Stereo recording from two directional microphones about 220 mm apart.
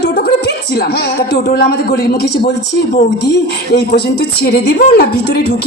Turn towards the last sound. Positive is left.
turn(degrees=50)  # may be behind; listen again after turning